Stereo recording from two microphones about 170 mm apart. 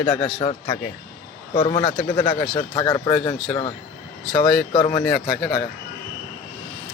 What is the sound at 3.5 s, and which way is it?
A man's voice, 10° left (ahead or behind).